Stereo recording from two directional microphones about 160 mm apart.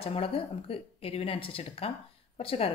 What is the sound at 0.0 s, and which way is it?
A woman's voice, 35° left (ahead or behind).